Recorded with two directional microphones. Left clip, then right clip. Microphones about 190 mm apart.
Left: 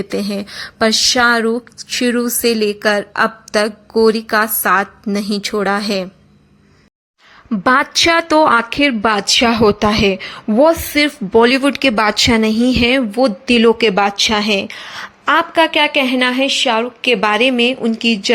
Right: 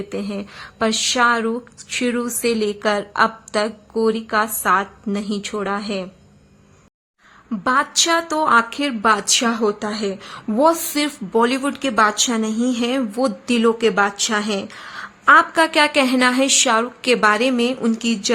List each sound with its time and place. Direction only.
0.1 s speech: 20° left (ahead or behind)
7.5 s a woman's voice: 30° left (ahead or behind); by 18.3 s 10° left (ahead or behind)